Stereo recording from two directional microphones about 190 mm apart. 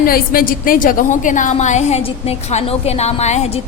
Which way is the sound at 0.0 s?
50° left (ahead or behind).